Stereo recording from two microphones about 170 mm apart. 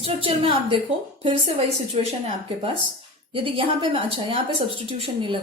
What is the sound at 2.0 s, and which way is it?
A woman's voice, 35° right (ahead or behind).